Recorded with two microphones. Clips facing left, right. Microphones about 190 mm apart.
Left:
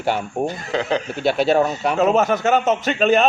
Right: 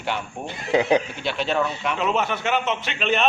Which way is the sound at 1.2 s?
40° left (ahead or behind).